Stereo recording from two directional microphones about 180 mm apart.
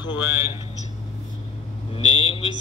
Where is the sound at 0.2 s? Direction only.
10° right (ahead or behind).